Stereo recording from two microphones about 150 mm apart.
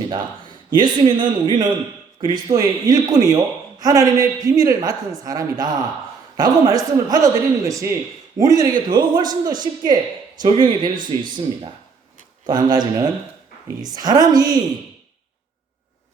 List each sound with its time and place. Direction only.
0.1 s a man's voice: 30° right (ahead or behind)